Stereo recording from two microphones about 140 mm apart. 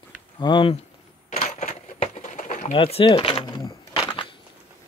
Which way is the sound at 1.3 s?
50° left (ahead or behind).